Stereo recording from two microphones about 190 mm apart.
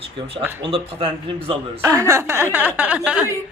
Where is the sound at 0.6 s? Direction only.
30° right (ahead or behind).